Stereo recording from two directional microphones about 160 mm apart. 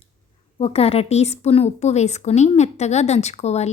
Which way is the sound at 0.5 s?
35° left (ahead or behind).